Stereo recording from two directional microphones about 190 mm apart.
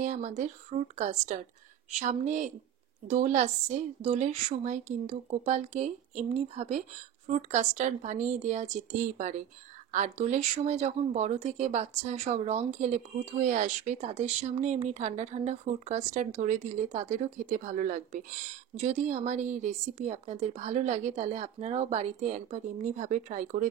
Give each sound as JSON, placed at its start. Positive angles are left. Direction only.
{"t": 0.0, "sound": "speech", "side_deg": -40}